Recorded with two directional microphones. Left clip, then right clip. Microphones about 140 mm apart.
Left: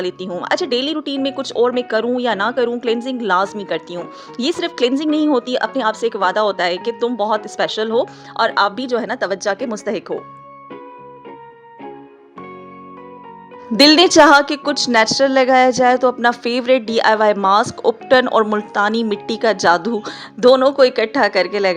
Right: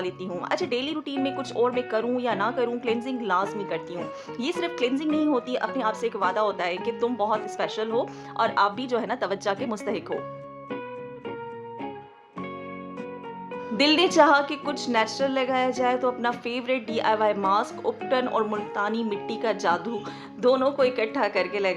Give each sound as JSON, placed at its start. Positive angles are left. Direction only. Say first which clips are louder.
{"t": 0.3, "sound": "a woman's voice", "louder": "left 9 dB", "side_deg": 35}
{"t": 13.7, "sound": "a woman's voice", "louder": "left 10 dB", "side_deg": 60}